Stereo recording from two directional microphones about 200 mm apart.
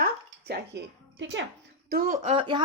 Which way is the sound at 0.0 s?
55° right (ahead or behind).